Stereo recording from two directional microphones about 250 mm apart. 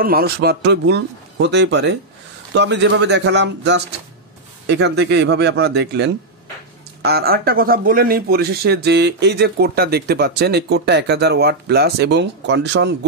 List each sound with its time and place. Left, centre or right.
0.0 s speech: right